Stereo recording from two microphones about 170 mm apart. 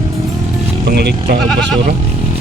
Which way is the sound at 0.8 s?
75° right (ahead or behind).